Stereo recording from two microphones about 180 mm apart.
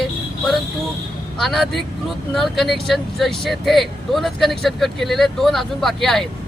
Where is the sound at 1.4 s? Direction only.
Centre (ahead or behind).